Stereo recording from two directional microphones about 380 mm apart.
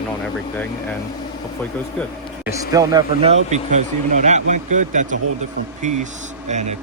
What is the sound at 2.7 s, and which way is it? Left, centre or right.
Speech, centre.